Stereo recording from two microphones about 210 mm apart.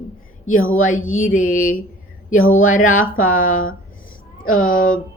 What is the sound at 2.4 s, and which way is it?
A woman's voice, 75° left (ahead or behind).